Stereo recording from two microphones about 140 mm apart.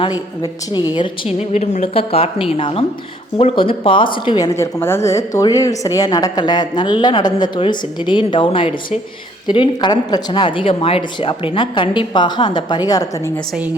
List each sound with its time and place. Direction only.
0.9 s a woman's voice: 40° left (ahead or behind)
1.5 s a woman's voice: 55° left (ahead or behind); by 13.3 s 25° left (ahead or behind)